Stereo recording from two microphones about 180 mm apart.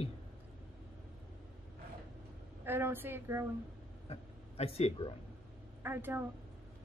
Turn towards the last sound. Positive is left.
turn(degrees=-10)  # may be behind; listen again after turning